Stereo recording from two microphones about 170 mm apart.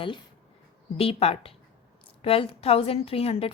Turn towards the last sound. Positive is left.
turn(degrees=35)  # may be behind; listen again after turning